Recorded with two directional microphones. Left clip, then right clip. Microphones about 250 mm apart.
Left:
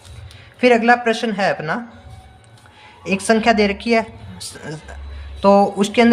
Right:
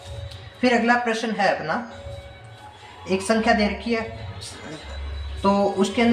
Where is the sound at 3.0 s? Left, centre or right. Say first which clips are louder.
Left 5 dB; left.